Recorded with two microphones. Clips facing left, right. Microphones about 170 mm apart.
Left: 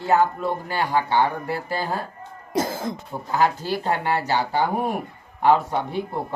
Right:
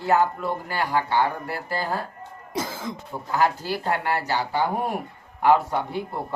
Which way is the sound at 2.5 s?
40° left (ahead or behind).